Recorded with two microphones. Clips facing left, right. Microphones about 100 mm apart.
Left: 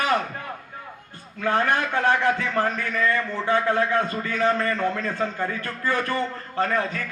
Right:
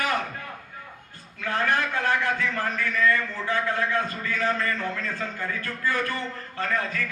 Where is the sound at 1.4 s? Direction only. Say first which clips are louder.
Left 3 dB; 30° left (ahead or behind).